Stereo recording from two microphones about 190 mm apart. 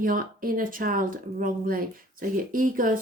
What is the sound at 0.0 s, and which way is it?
A woman's voice, 45° right (ahead or behind).